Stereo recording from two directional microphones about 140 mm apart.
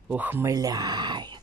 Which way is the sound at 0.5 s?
30° right (ahead or behind).